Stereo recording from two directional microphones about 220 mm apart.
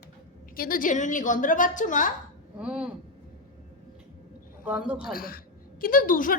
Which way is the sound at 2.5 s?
5° right (ahead or behind).